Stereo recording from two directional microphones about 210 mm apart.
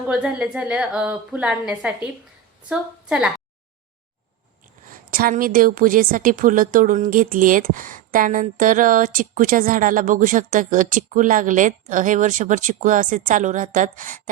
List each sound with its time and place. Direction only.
0.1 s a woman's voice: 5° right (ahead or behind)
4.9 s a woman's voice: 40° right (ahead or behind)